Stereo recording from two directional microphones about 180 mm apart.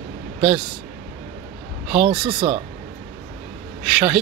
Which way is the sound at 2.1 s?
25° right (ahead or behind).